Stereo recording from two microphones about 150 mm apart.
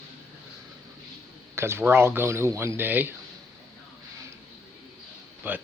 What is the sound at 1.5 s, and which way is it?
Speech, 15° right (ahead or behind).